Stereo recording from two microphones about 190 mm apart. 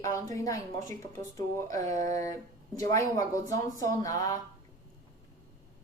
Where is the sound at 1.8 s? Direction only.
40° right (ahead or behind).